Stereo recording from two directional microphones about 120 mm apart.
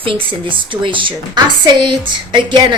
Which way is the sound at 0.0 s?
45° right (ahead or behind).